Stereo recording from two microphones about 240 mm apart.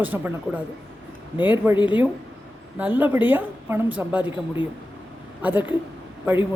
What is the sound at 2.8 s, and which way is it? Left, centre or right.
A woman's voice, centre.